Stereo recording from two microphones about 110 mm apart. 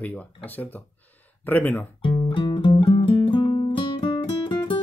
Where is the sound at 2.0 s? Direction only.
50° left (ahead or behind).